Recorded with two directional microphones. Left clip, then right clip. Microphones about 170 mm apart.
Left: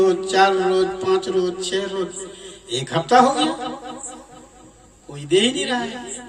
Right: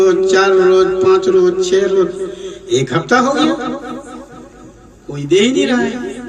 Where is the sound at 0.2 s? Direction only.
25° left (ahead or behind).